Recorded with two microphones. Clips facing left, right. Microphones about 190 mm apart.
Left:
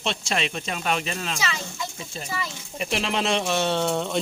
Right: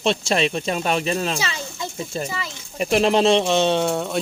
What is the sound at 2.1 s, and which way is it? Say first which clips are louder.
Speech: right 2 dB; 50° right (ahead or behind).